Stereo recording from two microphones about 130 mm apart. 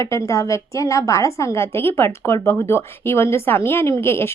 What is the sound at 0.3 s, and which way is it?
A woman's voice, 25° left (ahead or behind).